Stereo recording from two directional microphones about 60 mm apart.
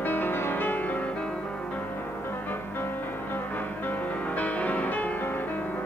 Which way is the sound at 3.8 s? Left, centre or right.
Left.